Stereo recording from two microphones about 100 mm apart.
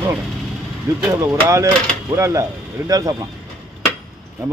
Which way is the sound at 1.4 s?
30° right (ahead or behind).